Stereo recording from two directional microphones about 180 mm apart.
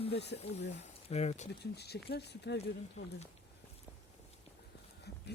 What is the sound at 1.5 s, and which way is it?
Speech, 65° left (ahead or behind).